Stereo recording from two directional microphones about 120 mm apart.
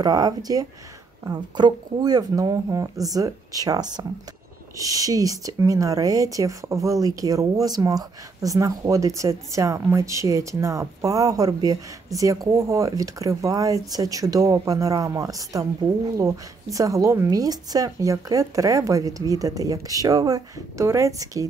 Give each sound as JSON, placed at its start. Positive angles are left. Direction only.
{"t": 0.0, "sound": "speech", "side_deg": -30}
{"t": 16.7, "sound": "speech", "side_deg": -25}